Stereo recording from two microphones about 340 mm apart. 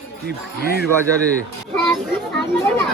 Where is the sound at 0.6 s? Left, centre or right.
Left.